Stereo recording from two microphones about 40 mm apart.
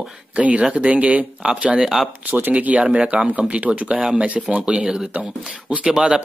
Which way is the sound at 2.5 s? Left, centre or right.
Right.